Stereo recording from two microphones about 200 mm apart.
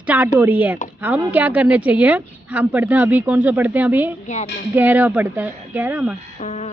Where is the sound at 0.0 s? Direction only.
5° right (ahead or behind).